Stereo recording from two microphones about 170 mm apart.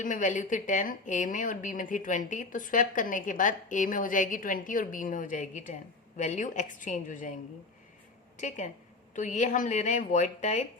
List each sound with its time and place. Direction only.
0.0 s speech: 50° left (ahead or behind)
8.4 s speech: 45° left (ahead or behind)